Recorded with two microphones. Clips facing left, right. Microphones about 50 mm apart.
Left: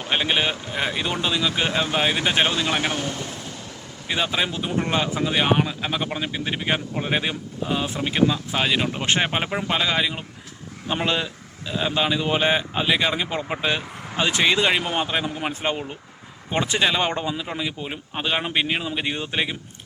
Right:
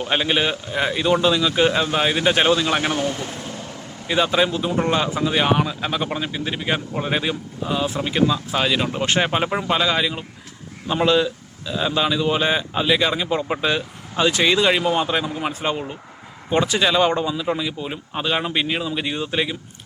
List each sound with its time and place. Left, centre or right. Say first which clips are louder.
0.1 s a man's voice: right 1 dB; centre
4.1 s a man's voice: right 5 dB; centre